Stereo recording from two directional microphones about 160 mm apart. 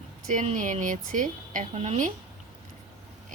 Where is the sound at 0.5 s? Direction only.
55° right (ahead or behind).